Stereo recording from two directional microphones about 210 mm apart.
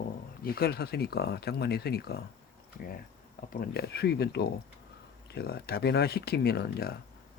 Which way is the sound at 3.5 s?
45° left (ahead or behind).